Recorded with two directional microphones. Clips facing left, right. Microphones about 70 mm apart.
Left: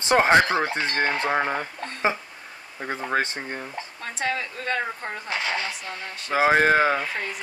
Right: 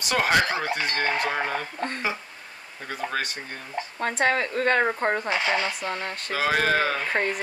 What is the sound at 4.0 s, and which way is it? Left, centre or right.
Speech, right.